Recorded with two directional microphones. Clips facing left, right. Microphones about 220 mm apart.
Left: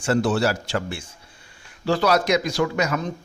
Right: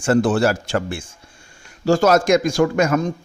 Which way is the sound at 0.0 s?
50° right (ahead or behind).